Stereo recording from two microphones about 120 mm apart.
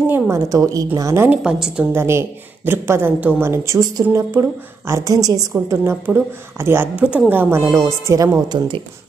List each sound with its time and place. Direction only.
0.1 s a woman's voice: 25° right (ahead or behind)
1.3 s a woman's voice: 10° right (ahead or behind)
1.9 s speech: 20° right (ahead or behind)
5.5 s a woman's voice: 20° right (ahead or behind)